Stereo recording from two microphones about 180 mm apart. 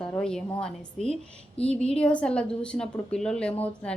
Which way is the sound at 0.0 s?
5° left (ahead or behind).